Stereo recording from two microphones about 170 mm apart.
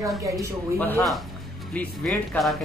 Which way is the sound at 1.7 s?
10° left (ahead or behind).